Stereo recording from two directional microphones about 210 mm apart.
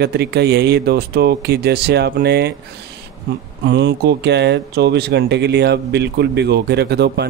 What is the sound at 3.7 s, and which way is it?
Speech, 55° right (ahead or behind).